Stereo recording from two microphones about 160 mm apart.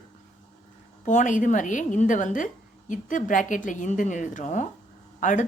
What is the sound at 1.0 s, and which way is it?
A woman's voice, 50° left (ahead or behind).